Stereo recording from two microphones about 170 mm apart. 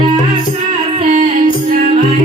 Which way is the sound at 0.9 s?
35° right (ahead or behind).